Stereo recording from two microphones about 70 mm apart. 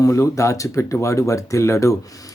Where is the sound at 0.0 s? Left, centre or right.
Left.